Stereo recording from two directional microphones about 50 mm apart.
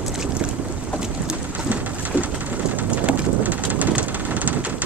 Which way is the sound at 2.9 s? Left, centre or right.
Right.